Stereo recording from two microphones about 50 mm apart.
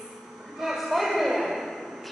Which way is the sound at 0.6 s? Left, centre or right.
Centre.